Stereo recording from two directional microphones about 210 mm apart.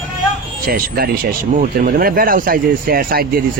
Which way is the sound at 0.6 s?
45° right (ahead or behind).